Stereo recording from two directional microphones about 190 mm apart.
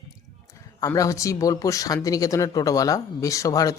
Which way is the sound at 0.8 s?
15° left (ahead or behind).